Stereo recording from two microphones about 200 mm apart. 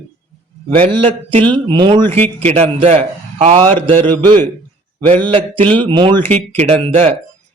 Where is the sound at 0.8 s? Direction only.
30° right (ahead or behind).